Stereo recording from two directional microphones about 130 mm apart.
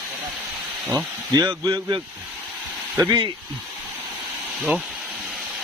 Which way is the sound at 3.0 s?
30° right (ahead or behind).